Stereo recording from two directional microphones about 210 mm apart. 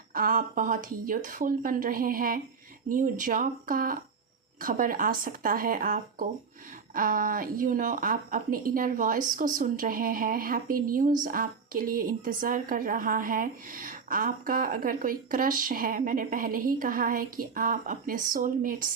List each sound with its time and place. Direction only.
0.1 s speech: 45° right (ahead or behind)